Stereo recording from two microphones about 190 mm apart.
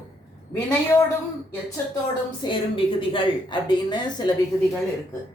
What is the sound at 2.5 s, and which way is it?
A woman's voice, 25° left (ahead or behind).